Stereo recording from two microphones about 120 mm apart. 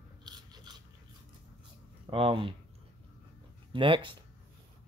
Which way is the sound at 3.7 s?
45° right (ahead or behind).